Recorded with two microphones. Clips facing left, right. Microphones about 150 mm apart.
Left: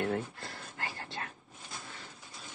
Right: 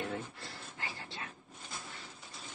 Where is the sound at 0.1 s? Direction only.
55° left (ahead or behind).